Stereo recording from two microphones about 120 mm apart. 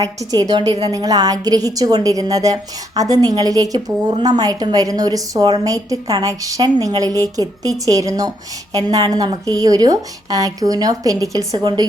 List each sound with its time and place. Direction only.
0.0 s a woman's voice: 30° right (ahead or behind)